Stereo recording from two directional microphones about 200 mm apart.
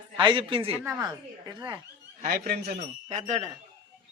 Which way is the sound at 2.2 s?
50° right (ahead or behind).